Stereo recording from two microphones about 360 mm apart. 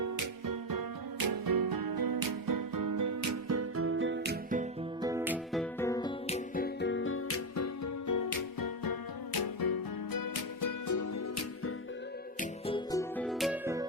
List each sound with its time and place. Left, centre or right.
0.0 s music: right
5.0 s music: centre
5.8 s music: centre; by 11.2 s left
12.4 s music: centre